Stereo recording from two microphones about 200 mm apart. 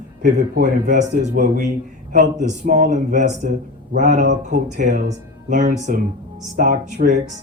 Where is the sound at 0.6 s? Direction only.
40° right (ahead or behind).